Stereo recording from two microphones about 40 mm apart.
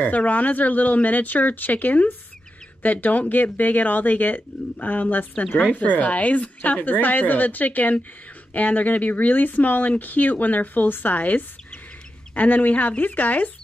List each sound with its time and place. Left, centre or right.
0.0 s speech: left